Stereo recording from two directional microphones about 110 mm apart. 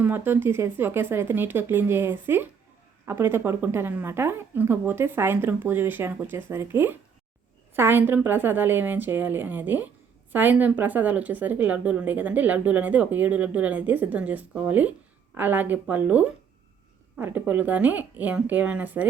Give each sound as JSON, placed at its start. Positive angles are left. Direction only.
{"t": 0.0, "sound": "a woman's voice", "side_deg": -20}